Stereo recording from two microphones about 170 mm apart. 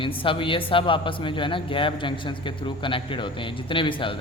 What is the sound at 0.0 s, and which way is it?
A man's voice, 30° left (ahead or behind).